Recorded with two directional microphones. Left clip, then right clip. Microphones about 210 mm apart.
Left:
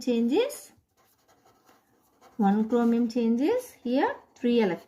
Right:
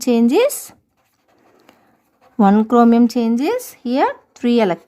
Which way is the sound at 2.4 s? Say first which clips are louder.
Right 12 dB; 50° right (ahead or behind).